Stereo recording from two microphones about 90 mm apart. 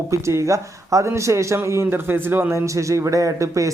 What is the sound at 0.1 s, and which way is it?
A man's voice, 35° right (ahead or behind).